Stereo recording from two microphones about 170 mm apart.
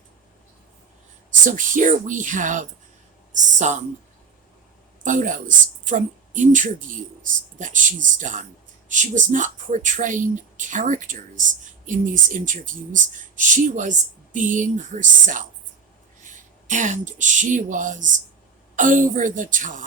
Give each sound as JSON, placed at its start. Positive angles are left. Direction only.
{"t": 1.3, "sound": "speech", "side_deg": -50}
{"t": 5.0, "sound": "speech", "side_deg": -50}